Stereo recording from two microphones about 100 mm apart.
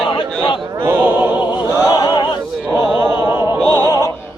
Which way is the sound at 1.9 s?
50° left (ahead or behind).